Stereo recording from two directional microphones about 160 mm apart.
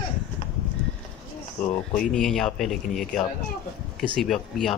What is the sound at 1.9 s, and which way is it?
Speech, 5° left (ahead or behind).